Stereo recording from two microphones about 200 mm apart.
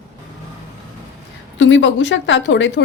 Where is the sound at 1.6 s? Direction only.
65° left (ahead or behind).